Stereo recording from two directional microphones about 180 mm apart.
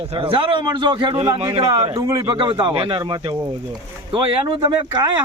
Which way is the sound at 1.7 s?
20° right (ahead or behind).